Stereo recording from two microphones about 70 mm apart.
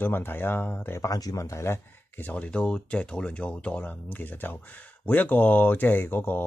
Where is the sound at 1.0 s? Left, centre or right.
Left.